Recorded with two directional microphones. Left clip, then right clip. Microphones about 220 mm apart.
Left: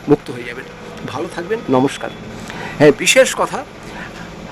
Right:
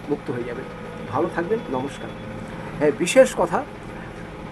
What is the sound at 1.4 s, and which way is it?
Speech, centre (ahead or behind).